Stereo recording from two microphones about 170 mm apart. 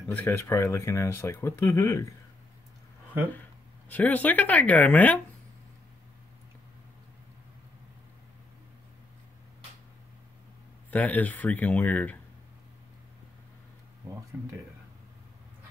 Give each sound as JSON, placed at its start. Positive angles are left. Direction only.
{"t": 0.1, "sound": "speech", "side_deg": 10}
{"t": 3.9, "sound": "speech", "side_deg": 10}
{"t": 10.9, "sound": "speech", "side_deg": 10}